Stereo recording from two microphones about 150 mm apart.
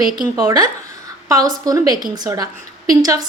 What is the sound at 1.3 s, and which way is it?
A woman's voice, 25° right (ahead or behind).